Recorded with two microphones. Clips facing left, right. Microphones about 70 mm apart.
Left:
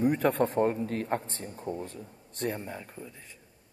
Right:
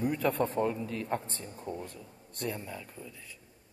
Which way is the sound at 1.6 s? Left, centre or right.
Left.